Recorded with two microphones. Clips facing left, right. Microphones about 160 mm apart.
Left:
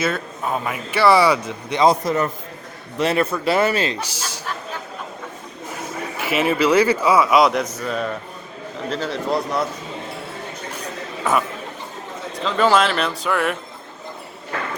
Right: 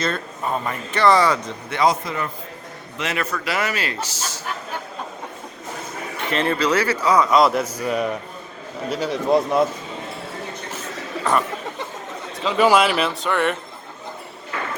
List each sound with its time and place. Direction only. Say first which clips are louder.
0.0 s a man's voice: left 2 dB; 5° left (ahead or behind)
2.0 s a man's voice: left 7 dB; 45° left (ahead or behind)
3.0 s speech: left 7 dB; 30° left (ahead or behind)
6.1 s a man's voice: left 2 dB; 5° left (ahead or behind); by 9.6 s 20° right (ahead or behind)
11.2 s speech: even; 5° left (ahead or behind)
12.4 s speech: right 1 dB; 10° right (ahead or behind)